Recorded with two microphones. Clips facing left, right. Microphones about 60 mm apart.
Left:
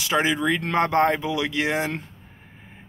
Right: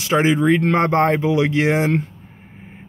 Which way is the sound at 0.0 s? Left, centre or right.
Right.